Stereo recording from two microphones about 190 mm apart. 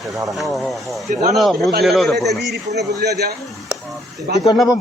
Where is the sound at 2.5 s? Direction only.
60° right (ahead or behind).